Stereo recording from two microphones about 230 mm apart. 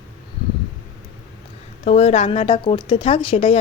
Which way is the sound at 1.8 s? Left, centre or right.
Left.